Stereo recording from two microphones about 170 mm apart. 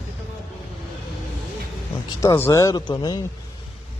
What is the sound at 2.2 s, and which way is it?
Speech, 20° left (ahead or behind).